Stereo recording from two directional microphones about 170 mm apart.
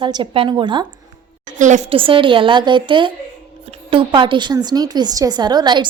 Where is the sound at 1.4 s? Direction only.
45° right (ahead or behind); by 5.9 s 25° right (ahead or behind).